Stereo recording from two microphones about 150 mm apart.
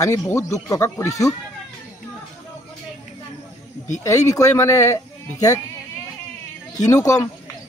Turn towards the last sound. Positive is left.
turn(degrees=20)  # may be behind; listen again after turning